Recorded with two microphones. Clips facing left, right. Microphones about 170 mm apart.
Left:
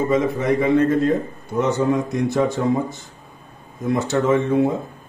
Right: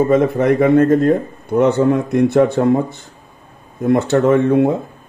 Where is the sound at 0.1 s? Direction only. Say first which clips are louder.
Right 5 dB; 55° right (ahead or behind).